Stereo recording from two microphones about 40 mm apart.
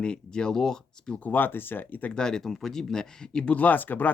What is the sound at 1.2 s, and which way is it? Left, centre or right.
Speech, left.